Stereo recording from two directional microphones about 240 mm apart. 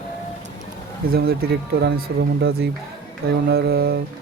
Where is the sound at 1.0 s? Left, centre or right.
Right.